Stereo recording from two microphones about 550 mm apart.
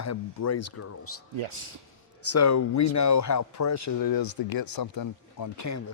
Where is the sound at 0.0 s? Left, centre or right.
Left.